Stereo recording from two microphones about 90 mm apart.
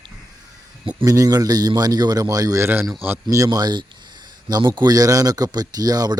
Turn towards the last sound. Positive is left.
turn(degrees=-45)  # may be behind; listen again after turning